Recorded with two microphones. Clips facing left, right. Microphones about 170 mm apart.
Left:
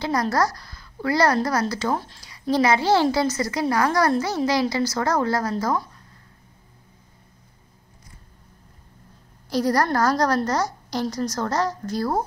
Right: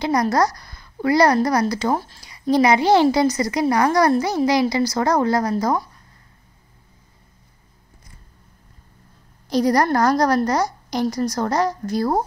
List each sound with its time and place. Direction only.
0.0 s a woman's voice: 15° right (ahead or behind)
9.5 s a woman's voice: 15° right (ahead or behind)